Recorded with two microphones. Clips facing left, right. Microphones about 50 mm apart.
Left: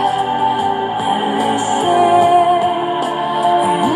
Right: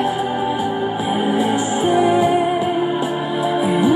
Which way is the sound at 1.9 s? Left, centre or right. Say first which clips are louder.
Left 4 dB; left.